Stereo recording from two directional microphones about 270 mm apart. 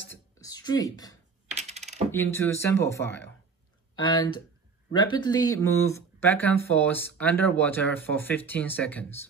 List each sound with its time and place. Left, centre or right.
0.1 s a sound: centre
1.6 s coin: right
2.0 s speech: centre